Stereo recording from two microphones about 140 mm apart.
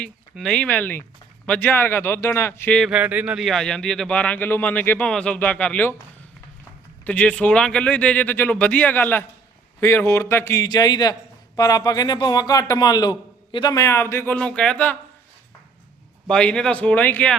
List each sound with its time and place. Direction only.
0.0 s speech: 5° left (ahead or behind)
2.8 s speech: 10° right (ahead or behind); by 5.9 s 10° left (ahead or behind)
7.0 s a man's voice: 10° left (ahead or behind)
16.2 s speech: 5° left (ahead or behind)